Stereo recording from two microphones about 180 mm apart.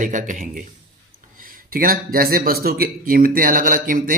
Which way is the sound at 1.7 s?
55° right (ahead or behind).